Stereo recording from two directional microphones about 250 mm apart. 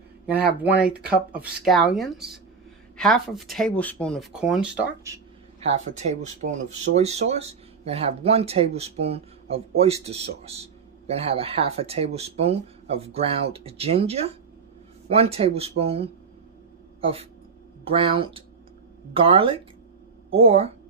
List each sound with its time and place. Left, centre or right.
0.6 s speech: centre
5.5 s speech: right
17.8 s speech: right